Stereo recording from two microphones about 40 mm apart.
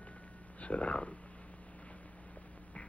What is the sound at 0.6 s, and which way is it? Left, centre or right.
Speech, left.